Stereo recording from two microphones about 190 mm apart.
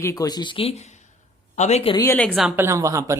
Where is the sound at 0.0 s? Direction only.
15° left (ahead or behind); by 2.0 s 30° left (ahead or behind).